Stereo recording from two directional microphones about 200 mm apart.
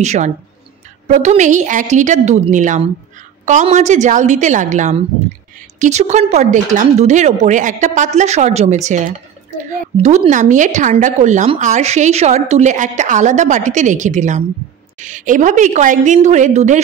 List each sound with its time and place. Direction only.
0.0 s speech: 35° right (ahead or behind)